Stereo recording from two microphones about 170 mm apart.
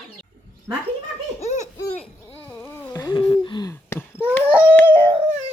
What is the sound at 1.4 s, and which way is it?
Baby laughter, 45° left (ahead or behind).